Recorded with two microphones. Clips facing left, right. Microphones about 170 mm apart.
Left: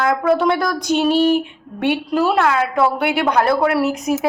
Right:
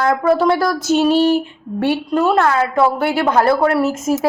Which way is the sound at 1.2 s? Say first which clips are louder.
Right 1 dB; 40° right (ahead or behind).